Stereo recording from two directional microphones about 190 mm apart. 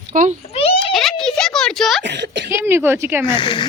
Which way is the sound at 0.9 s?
Centre (ahead or behind).